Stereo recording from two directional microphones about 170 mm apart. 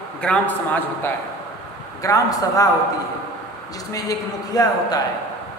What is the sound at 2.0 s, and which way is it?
Speech, 20° left (ahead or behind).